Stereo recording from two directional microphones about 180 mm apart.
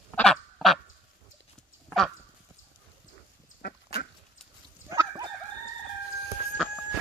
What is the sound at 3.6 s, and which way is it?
Dog, 65° left (ahead or behind).